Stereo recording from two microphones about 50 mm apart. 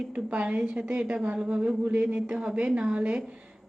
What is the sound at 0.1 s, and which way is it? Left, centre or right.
A woman's voice, right.